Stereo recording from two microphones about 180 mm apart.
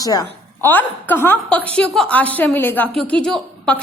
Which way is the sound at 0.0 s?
20° left (ahead or behind).